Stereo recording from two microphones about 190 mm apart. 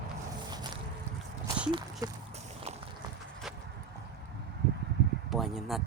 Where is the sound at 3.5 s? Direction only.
5° right (ahead or behind).